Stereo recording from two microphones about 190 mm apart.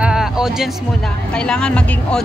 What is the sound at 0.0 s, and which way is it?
Music, 5° right (ahead or behind).